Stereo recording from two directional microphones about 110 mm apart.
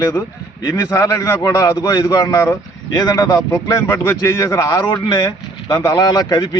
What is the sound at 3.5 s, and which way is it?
Speech, 30° left (ahead or behind).